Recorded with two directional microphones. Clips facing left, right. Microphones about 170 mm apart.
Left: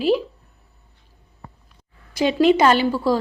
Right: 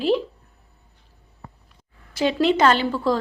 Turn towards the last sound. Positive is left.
turn(degrees=10)  # may be behind; listen again after turning